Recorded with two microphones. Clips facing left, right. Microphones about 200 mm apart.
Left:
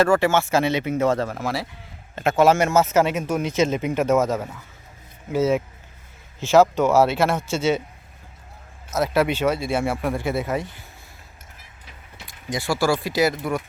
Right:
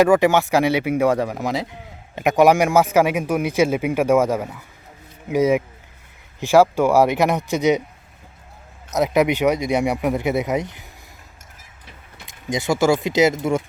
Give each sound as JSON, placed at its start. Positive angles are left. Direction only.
{"t": 0.0, "sound": "speech", "side_deg": -15}
{"t": 8.9, "sound": "speech", "side_deg": -15}
{"t": 12.2, "sound": "speech", "side_deg": -20}